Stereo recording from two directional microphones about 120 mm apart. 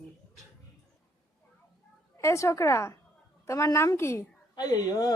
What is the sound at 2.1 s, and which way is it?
A woman's voice, 25° left (ahead or behind).